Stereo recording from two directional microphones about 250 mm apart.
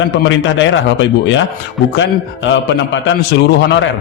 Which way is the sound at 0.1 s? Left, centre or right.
Left.